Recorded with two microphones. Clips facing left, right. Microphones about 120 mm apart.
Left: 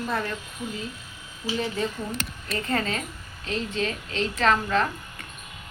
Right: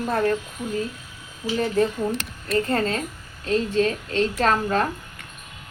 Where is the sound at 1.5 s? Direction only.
50° right (ahead or behind).